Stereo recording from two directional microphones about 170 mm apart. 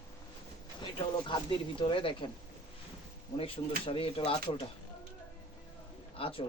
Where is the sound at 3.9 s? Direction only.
35° left (ahead or behind).